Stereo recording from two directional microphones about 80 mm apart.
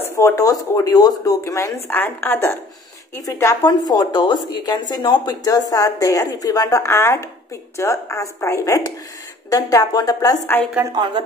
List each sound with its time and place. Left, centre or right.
0.0 s a sound: left
0.4 s a woman's voice: left
1.4 s a woman's voice: left
3.6 s a woman's voice: left
6.9 s a woman's voice: left
10.9 s speech: right